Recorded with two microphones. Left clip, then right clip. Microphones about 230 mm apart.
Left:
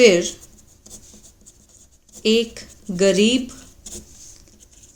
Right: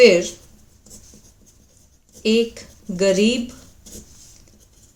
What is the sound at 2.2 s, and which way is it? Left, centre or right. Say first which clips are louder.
Speech: even; left.